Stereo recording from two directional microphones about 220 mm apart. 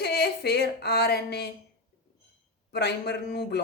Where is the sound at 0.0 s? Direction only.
45° left (ahead or behind).